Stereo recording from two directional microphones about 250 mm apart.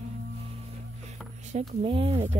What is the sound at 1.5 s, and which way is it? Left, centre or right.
Speech, right.